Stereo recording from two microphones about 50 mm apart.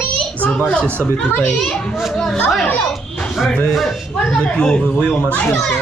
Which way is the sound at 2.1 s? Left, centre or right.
Centre.